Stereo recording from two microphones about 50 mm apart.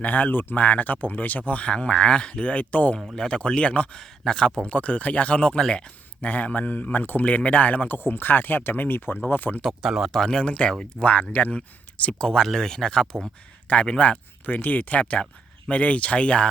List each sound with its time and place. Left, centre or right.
0.0 s speech: left
3.2 s speech: centre
4.0 s speech: centre; by 9.6 s left
9.8 s speech: centre
10.1 s speech: centre
11.0 s speech: left
12.2 s speech: centre
14.4 s speech: left